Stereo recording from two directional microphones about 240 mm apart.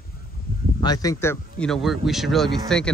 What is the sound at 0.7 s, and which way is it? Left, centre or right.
Speech, centre.